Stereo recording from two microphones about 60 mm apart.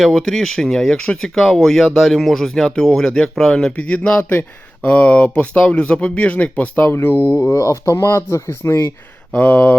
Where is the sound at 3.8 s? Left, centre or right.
Left.